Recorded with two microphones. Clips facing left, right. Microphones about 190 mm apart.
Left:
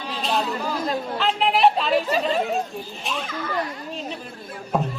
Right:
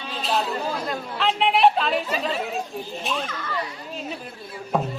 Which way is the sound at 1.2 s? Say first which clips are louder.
Right 1 dB; centre (ahead or behind).